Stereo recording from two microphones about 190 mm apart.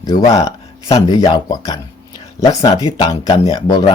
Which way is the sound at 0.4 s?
25° left (ahead or behind).